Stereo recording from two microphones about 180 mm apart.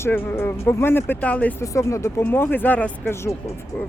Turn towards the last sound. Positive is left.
turn(degrees=15)  # may be behind; listen again after turning